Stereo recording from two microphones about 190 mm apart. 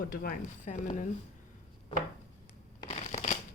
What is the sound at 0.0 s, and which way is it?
Speech, 50° left (ahead or behind).